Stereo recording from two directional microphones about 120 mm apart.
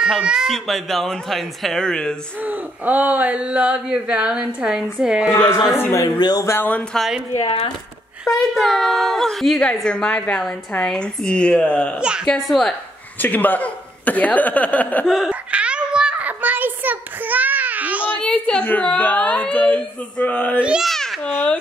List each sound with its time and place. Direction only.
0.0 s a woman's voice: 5° right (ahead or behind)
2.4 s speech: 15° right (ahead or behind)
5.8 s a woman's voice: 15° left (ahead or behind)
6.1 s speech: 35° left (ahead or behind)
6.4 s a woman's voice: 20° left (ahead or behind)
8.3 s a woman's voice: centre (ahead or behind)
13.2 s a woman's voice: 15° left (ahead or behind)
15.0 s a sound: 5° right (ahead or behind)
18.1 s a woman's voice: 10° left (ahead or behind)
20.6 s a child's voice: 5° right (ahead or behind)